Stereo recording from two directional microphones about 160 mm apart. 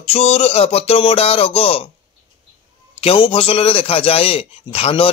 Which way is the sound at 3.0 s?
35° left (ahead or behind).